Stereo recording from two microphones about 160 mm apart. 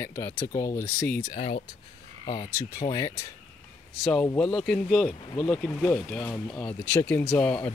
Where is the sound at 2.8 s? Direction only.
30° left (ahead or behind).